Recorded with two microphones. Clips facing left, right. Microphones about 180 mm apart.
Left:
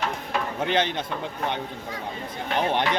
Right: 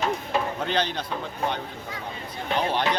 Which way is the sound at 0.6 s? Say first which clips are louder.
Left 2 dB; 20° left (ahead or behind).